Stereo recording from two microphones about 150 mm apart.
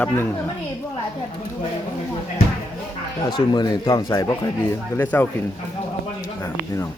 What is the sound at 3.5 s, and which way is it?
Speech, 30° left (ahead or behind).